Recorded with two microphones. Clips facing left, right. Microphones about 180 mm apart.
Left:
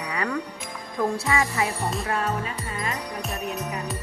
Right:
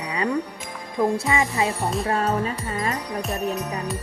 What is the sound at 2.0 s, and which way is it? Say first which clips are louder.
Music: right 6 dB; 35° right (ahead or behind).